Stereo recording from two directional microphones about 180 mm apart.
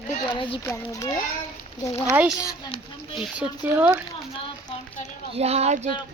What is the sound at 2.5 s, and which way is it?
Speech, 25° left (ahead or behind).